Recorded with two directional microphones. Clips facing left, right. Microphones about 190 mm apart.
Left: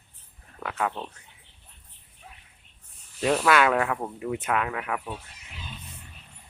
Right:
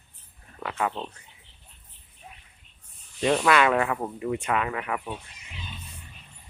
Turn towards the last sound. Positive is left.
turn(degrees=0)  # may be behind; listen again after turning